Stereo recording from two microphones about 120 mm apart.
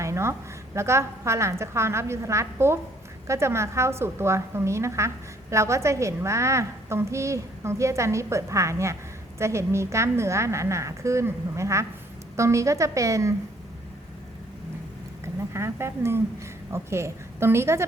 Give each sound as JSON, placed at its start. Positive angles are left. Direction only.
{"t": 0.0, "sound": "a woman's voice", "side_deg": -25}
{"t": 15.5, "sound": "a woman's voice", "side_deg": -20}